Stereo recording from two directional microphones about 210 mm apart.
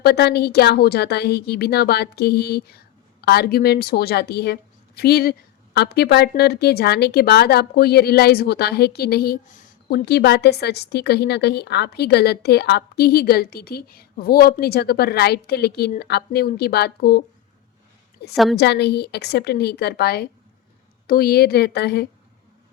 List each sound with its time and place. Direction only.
0.0 s a woman's voice: 50° left (ahead or behind)
10.1 s a woman's voice: 50° left (ahead or behind)
18.5 s a woman's voice: 55° left (ahead or behind)